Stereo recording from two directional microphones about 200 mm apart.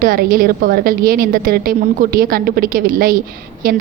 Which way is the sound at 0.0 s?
45° right (ahead or behind).